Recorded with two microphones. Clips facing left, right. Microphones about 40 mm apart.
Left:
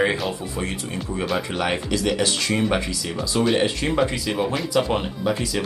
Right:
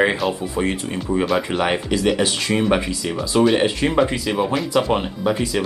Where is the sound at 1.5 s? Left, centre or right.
Centre.